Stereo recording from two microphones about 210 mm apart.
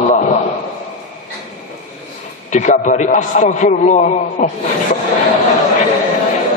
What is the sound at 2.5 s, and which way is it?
A man's voice, 35° left (ahead or behind).